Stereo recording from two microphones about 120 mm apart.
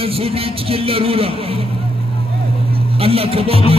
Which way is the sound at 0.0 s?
55° right (ahead or behind).